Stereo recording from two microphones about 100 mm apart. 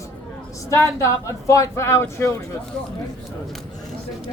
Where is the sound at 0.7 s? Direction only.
30° left (ahead or behind).